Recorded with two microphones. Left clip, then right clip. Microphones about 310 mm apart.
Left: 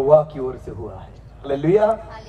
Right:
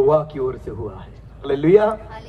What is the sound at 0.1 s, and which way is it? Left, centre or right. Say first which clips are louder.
A man's voice: left 3 dB; right.